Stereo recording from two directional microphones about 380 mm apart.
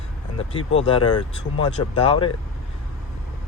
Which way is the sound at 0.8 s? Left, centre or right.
Centre.